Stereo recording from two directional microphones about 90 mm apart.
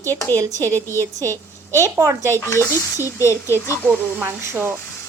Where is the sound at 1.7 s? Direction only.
35° right (ahead or behind).